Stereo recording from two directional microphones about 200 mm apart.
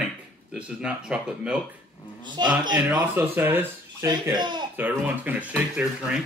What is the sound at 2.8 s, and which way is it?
Speech, 10° right (ahead or behind).